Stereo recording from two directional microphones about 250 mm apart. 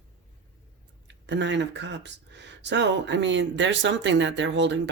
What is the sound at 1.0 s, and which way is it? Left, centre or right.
Speech, right.